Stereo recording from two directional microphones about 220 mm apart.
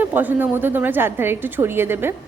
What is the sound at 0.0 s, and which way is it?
A woman's voice, 10° right (ahead or behind).